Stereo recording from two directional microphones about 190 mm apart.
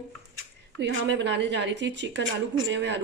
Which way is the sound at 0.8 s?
70° right (ahead or behind).